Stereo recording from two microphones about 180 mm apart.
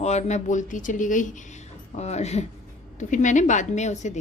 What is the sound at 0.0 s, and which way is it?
A woman's voice, 40° left (ahead or behind).